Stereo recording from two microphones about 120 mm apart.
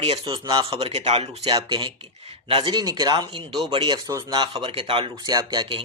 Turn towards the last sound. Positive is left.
turn(degrees=-40)  # may be behind; listen again after turning